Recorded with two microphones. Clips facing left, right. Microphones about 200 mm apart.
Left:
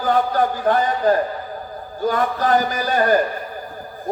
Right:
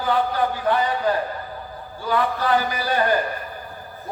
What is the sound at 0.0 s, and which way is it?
A man's voice, 45° left (ahead or behind).